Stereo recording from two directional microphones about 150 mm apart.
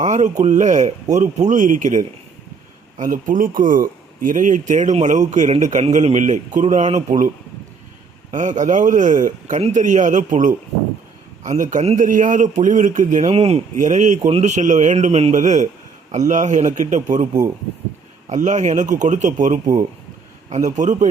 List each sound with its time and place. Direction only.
0.0 s a man's voice: 55° right (ahead or behind)
8.3 s a man's voice: 55° right (ahead or behind)
13.3 s speech: 40° right (ahead or behind)
13.7 s a man's voice: 55° right (ahead or behind)
18.3 s a man's voice: 55° right (ahead or behind)